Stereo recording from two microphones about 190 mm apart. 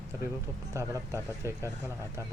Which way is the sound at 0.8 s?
15° right (ahead or behind).